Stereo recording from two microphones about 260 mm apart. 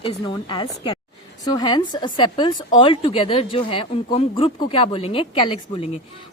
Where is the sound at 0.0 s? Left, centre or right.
Centre.